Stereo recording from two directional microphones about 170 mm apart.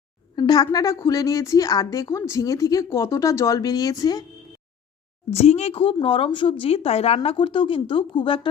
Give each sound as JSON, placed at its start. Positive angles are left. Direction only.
{"t": 0.3, "sound": "a woman's voice", "side_deg": 25}
{"t": 5.3, "sound": "speech", "side_deg": 40}